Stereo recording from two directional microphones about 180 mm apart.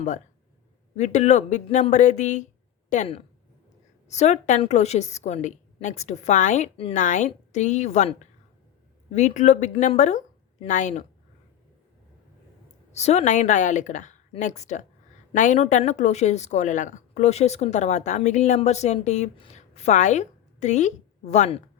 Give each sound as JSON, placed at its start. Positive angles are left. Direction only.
{"t": 0.9, "sound": "a woman's voice", "side_deg": 40}
{"t": 12.9, "sound": "a woman's voice", "side_deg": 35}